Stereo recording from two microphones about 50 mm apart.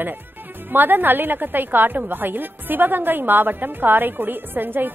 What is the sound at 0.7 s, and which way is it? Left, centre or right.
A woman's voice, right.